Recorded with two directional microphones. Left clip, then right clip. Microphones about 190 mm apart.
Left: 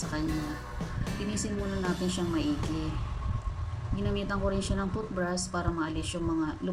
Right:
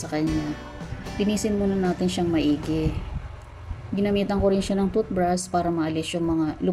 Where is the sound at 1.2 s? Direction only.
15° right (ahead or behind).